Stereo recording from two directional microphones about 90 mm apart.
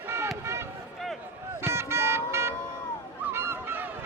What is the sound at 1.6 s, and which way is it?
Music, 30° right (ahead or behind).